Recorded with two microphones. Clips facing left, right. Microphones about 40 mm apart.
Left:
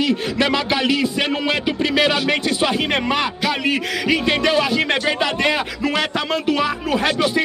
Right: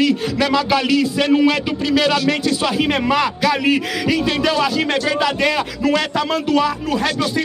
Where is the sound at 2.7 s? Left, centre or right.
Centre.